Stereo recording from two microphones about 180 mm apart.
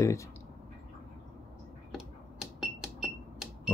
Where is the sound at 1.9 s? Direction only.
Centre (ahead or behind).